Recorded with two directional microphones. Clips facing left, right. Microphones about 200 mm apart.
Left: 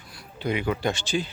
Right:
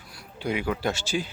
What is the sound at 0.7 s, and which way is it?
Speech, 5° right (ahead or behind).